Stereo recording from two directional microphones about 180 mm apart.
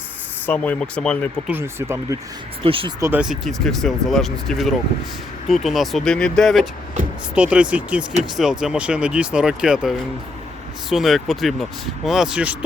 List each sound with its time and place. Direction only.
0.4 s speech: 10° left (ahead or behind)
1.5 s speech: 10° right (ahead or behind)
2.6 s speech: 30° right (ahead or behind)
3.0 s speech: 10° right (ahead or behind)